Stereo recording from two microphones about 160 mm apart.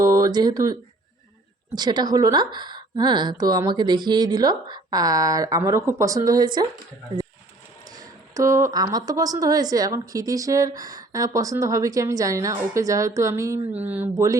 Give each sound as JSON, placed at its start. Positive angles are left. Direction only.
{"t": 0.0, "sound": "a sound", "side_deg": -20}
{"t": 1.7, "sound": "a woman's voice", "side_deg": -25}
{"t": 7.9, "sound": "a woman's voice", "side_deg": -20}